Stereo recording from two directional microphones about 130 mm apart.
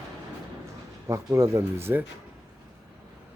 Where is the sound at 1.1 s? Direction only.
25° right (ahead or behind).